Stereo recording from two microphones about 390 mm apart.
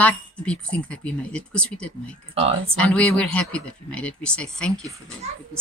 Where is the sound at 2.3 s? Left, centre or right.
Centre.